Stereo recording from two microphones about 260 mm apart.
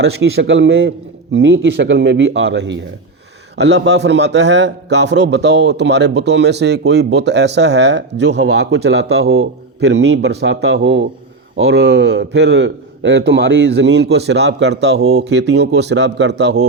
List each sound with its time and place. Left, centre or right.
0.0 s a man's voice: right